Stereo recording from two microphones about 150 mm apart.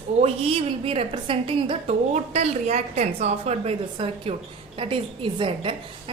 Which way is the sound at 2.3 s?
45° right (ahead or behind).